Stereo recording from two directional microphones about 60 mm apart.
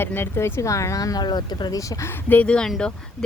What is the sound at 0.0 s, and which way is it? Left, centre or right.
Speech, left.